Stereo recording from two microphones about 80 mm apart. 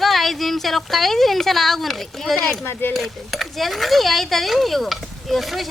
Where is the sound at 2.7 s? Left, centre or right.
Left.